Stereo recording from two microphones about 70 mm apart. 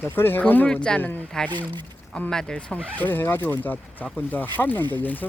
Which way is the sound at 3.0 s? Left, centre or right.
Left.